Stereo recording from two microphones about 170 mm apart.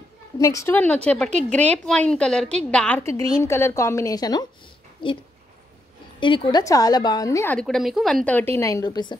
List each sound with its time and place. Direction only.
0.4 s a woman's voice: 20° left (ahead or behind)
7.5 s a woman's voice: centre (ahead or behind); by 9.2 s 25° left (ahead or behind)